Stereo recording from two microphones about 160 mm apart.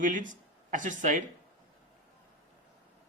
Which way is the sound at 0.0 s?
55° right (ahead or behind).